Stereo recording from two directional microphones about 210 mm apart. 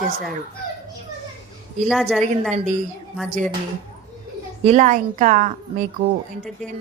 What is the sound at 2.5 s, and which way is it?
Speech, 35° right (ahead or behind).